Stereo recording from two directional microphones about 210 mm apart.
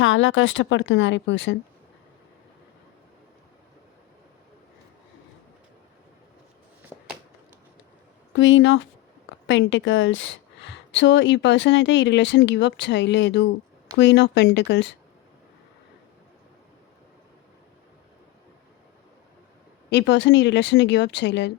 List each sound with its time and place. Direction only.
0.0 s a woman's voice: 65° left (ahead or behind)
6.9 s a sound: 5° right (ahead or behind)
8.4 s a woman's voice: 65° left (ahead or behind)
19.9 s a woman's voice: 55° left (ahead or behind)